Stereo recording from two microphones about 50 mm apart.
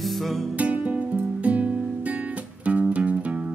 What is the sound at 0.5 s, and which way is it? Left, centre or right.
Music, right.